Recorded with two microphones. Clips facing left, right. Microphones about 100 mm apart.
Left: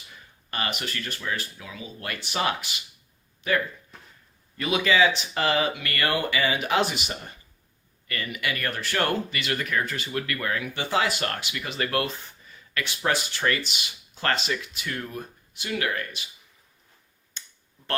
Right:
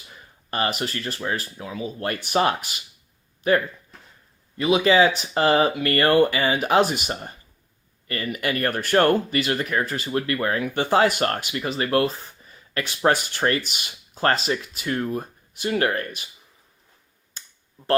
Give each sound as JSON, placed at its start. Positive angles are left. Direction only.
{"t": 0.5, "sound": "speech", "side_deg": -35}
{"t": 4.5, "sound": "speech", "side_deg": -30}
{"t": 17.4, "sound": "finger snapping", "side_deg": -40}